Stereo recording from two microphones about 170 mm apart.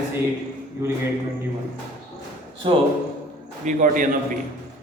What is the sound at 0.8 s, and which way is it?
Speech, 15° right (ahead or behind).